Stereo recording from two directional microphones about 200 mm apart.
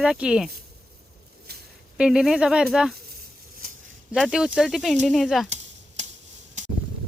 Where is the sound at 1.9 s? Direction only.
5° right (ahead or behind).